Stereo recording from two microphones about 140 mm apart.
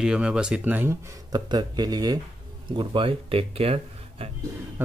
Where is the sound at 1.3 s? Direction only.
30° right (ahead or behind).